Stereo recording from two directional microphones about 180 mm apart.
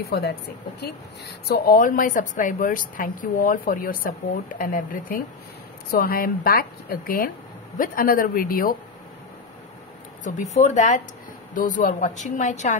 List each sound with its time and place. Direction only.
0.0 s speech: 60° left (ahead or behind)
1.5 s a woman's voice: 55° left (ahead or behind)
10.2 s a woman's voice: 40° left (ahead or behind)